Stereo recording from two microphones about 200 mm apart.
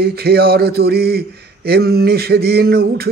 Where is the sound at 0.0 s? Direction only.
50° right (ahead or behind).